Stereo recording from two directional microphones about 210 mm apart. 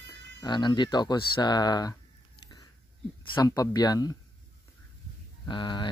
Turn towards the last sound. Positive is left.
turn(degrees=20)  # may be behind; listen again after turning